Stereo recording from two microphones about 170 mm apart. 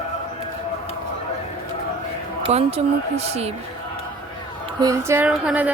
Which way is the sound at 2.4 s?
35° right (ahead or behind).